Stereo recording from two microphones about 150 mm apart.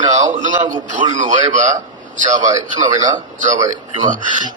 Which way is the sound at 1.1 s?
55° right (ahead or behind).